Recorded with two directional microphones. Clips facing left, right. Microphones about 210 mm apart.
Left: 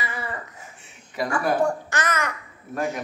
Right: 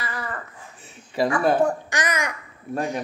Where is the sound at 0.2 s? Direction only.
10° left (ahead or behind).